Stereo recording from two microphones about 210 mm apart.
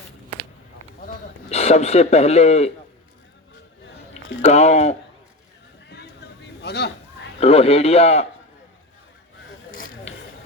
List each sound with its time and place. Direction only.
1.0 s a man's voice: 30° left (ahead or behind)
4.4 s speech: 30° left (ahead or behind)
5.9 s a sound: 55° left (ahead or behind)
7.3 s a man's voice: 30° left (ahead or behind)